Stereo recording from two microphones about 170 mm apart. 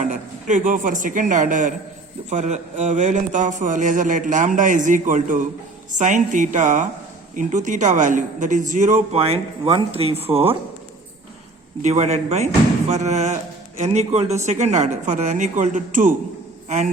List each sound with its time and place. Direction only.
0.0 s a man's voice: 45° right (ahead or behind)
11.8 s a man's voice: 40° right (ahead or behind)